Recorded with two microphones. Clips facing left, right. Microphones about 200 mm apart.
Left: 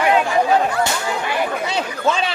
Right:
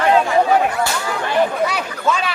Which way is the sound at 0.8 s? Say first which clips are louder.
Even; 25° left (ahead or behind).